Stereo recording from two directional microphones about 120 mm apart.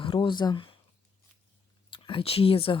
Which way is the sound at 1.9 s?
45° left (ahead or behind).